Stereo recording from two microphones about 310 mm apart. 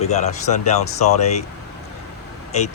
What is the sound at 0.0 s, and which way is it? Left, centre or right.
Speech, left.